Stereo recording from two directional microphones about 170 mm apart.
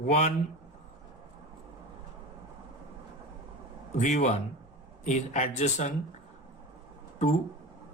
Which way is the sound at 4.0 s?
45° left (ahead or behind).